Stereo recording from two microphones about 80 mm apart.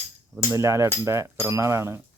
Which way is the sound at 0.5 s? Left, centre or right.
Right.